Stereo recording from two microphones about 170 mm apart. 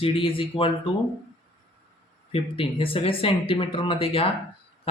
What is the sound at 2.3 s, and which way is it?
Speech, 35° left (ahead or behind).